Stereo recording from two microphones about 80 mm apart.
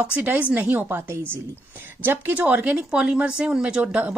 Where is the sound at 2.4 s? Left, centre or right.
Centre.